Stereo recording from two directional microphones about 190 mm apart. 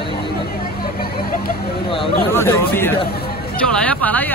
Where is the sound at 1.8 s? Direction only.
25° left (ahead or behind).